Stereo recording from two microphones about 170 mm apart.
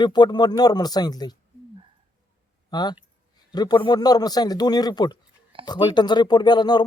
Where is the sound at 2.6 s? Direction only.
25° left (ahead or behind).